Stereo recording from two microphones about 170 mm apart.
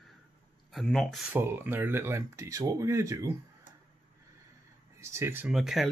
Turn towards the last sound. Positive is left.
turn(degrees=0)  # may be behind; listen again after turning